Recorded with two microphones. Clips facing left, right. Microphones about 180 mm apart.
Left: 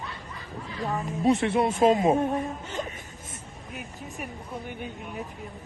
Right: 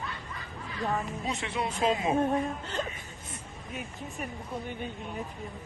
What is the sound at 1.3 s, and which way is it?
Speech, 50° left (ahead or behind).